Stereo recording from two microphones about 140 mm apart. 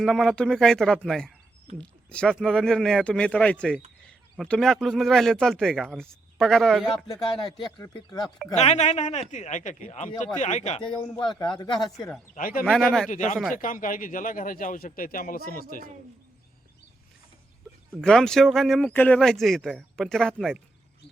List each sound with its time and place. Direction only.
0.0 s speech: centre (ahead or behind)
7.6 s speech: 30° left (ahead or behind)
8.5 s speech: 55° left (ahead or behind)
11.2 s speech: 35° left (ahead or behind)
12.3 s a man's voice: 85° left
12.6 s speech: 5° left (ahead or behind)
13.1 s speech: 65° left (ahead or behind); by 15.6 s 90° left
18.0 s speech: 5° left (ahead or behind)